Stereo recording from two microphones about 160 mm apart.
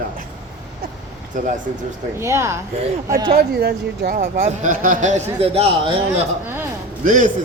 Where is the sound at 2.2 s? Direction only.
15° right (ahead or behind).